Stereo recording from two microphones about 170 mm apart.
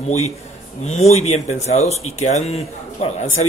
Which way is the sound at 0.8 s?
40° left (ahead or behind).